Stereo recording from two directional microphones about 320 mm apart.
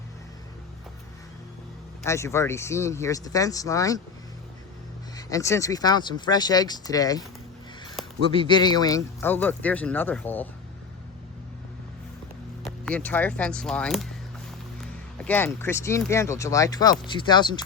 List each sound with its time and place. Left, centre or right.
2.0 s speech: centre
5.1 s speech: centre
8.0 s a sound: centre
8.4 s speech: centre
12.6 s speech: centre